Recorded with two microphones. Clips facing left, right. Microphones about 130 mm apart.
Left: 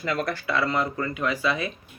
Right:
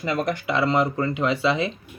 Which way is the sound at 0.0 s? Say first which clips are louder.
Right 3 dB; 20° right (ahead or behind).